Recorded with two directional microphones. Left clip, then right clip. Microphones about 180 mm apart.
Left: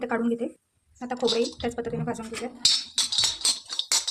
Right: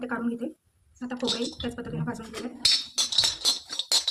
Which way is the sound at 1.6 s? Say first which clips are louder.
Left 5 dB; 45° left (ahead or behind).